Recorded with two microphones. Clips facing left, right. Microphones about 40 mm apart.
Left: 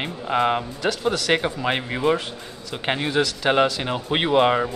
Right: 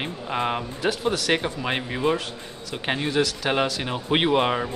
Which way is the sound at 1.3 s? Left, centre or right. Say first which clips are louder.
Left 3 dB; centre.